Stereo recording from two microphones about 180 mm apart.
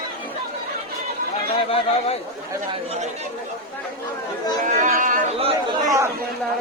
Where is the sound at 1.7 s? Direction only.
30° left (ahead or behind).